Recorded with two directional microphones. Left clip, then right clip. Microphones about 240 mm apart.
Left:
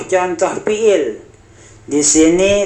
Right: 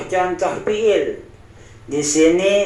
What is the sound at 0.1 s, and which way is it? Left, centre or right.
Speech, left.